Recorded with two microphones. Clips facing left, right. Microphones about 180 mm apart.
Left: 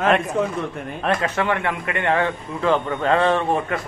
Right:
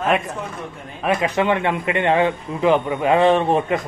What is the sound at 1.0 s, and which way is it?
A man's voice, 15° right (ahead or behind).